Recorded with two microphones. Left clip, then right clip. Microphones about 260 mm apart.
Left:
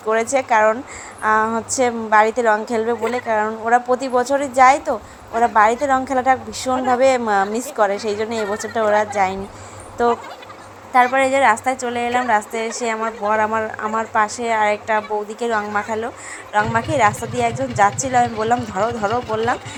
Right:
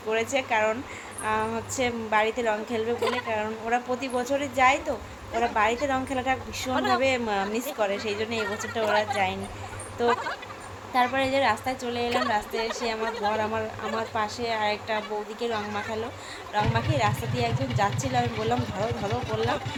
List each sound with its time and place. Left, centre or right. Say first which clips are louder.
0.1 s a woman's voice: left 9 dB; left
10.9 s a woman's voice: left 9 dB; centre